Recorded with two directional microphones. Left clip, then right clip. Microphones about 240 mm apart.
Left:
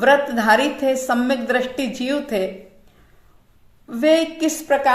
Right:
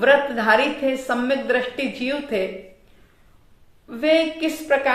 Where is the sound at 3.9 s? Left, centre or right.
Left.